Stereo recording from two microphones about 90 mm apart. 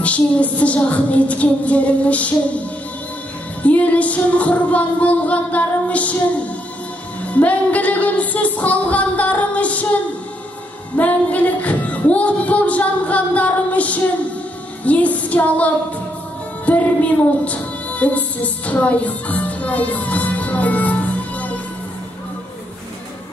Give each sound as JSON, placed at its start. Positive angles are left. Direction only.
{"t": 0.0, "sound": "music", "side_deg": 15}
{"t": 3.6, "sound": "music", "side_deg": 15}
{"t": 11.0, "sound": "music", "side_deg": 15}